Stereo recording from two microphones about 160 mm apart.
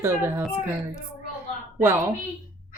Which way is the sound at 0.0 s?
15° right (ahead or behind).